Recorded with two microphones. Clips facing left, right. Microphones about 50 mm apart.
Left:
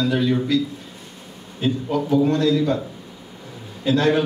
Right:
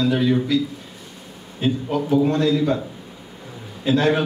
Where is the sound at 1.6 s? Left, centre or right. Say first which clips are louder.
Even; centre.